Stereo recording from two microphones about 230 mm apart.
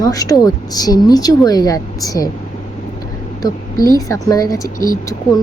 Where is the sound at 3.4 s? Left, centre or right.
Centre.